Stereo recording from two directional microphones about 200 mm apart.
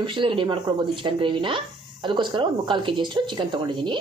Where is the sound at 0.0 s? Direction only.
25° right (ahead or behind).